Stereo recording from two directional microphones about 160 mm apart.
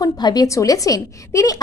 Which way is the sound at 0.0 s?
25° left (ahead or behind).